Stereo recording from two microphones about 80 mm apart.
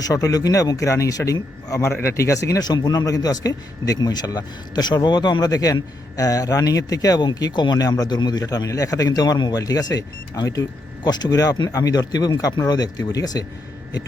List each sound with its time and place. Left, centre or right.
0.0 s speech: left